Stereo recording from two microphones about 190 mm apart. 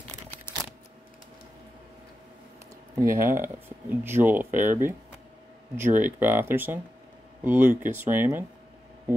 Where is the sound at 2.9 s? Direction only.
15° right (ahead or behind).